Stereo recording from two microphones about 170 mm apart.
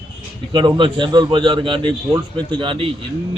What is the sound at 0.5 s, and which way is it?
A man's voice, 30° right (ahead or behind).